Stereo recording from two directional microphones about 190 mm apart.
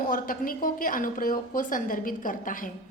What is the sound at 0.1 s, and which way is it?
A woman's voice, 50° left (ahead or behind).